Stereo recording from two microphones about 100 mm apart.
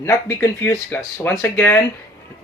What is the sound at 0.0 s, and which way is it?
Speech, 25° left (ahead or behind).